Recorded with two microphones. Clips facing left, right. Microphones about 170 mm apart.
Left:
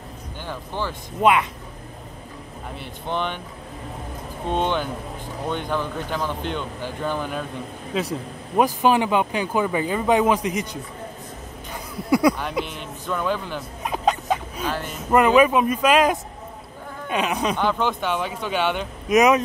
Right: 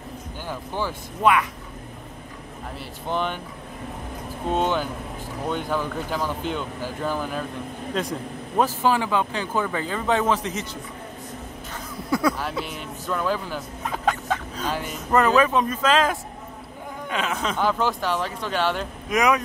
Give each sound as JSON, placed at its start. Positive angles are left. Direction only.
{"t": 0.5, "sound": "speech", "side_deg": -10}
{"t": 1.2, "sound": "speech", "side_deg": 25}
{"t": 2.8, "sound": "speech", "side_deg": -5}
{"t": 4.5, "sound": "speech", "side_deg": -5}
{"t": 8.6, "sound": "speech", "side_deg": 20}
{"t": 11.7, "sound": "a sound", "side_deg": 15}
{"t": 12.6, "sound": "speech", "side_deg": -5}
{"t": 13.8, "sound": "a sound", "side_deg": 15}
{"t": 14.7, "sound": "speech", "side_deg": -10}
{"t": 15.0, "sound": "speech", "side_deg": 10}
{"t": 17.6, "sound": "speech", "side_deg": -5}
{"t": 19.0, "sound": "speech", "side_deg": 20}